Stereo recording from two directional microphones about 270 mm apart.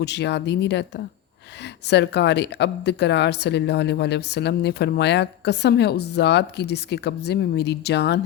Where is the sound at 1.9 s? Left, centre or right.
Left.